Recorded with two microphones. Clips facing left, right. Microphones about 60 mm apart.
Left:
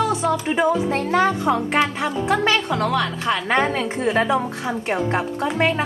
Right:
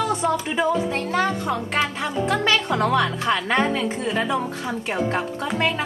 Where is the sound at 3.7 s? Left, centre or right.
Left.